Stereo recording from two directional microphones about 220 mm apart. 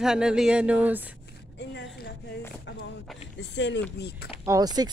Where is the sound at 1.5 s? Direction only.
50° left (ahead or behind).